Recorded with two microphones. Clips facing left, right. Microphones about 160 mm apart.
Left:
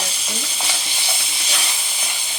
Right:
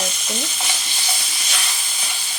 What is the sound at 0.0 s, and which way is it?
Stir, 30° left (ahead or behind).